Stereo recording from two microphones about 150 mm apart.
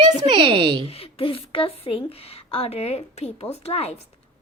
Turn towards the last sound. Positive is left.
turn(degrees=45)  # may be behind; listen again after turning